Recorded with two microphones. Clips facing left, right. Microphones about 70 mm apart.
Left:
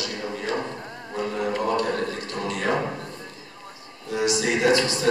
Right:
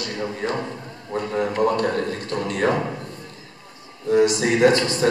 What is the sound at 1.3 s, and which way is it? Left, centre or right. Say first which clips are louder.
Speech: right 4 dB; right.